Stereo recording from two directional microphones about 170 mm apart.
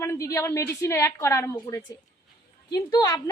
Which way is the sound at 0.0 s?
20° left (ahead or behind).